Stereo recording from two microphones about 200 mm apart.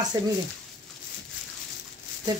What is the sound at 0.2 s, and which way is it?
Speech, 20° right (ahead or behind).